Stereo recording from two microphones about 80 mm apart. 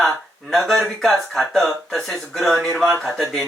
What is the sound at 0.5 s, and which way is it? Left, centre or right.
Speech, centre.